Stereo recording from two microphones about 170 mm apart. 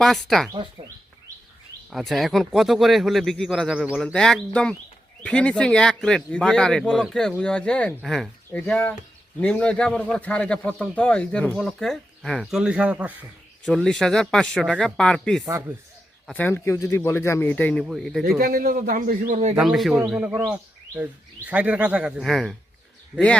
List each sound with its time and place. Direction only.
0.0 s a man's voice: centre (ahead or behind)
0.5 s speech: 30° right (ahead or behind)
1.9 s a man's voice: centre (ahead or behind)
15.4 s speech: 15° right (ahead or behind)
16.2 s a man's voice: 10° left (ahead or behind)
18.3 s a man's voice: 60° right (ahead or behind); by 19.5 s 45° right (ahead or behind)
19.5 s a man's voice: centre (ahead or behind)